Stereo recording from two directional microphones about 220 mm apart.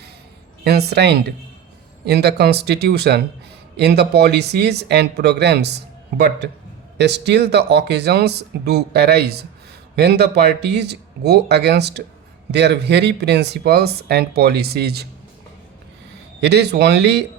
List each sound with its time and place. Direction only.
0.6 s speech: 45° right (ahead or behind)
16.4 s speech: 50° right (ahead or behind)